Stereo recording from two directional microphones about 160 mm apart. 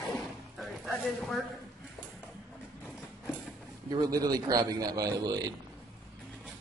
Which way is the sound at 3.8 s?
25° right (ahead or behind).